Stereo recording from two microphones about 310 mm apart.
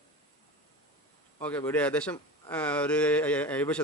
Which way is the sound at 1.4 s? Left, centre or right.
Centre.